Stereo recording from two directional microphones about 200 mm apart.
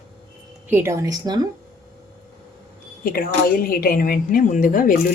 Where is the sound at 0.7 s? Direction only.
15° right (ahead or behind).